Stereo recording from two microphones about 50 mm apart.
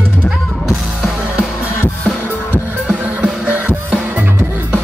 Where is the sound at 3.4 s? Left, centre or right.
Right.